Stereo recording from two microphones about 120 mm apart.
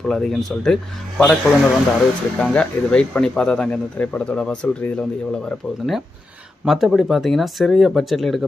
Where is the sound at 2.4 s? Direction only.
10° left (ahead or behind).